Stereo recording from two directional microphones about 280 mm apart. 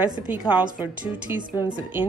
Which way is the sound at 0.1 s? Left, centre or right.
Centre.